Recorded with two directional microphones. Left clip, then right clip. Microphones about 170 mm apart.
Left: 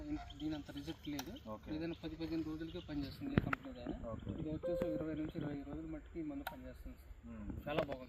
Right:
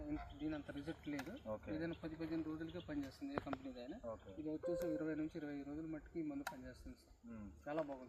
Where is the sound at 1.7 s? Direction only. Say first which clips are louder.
Left 2 dB; 10° right (ahead or behind).